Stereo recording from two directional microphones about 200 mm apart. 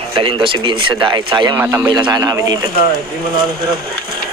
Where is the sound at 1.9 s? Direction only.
20° right (ahead or behind).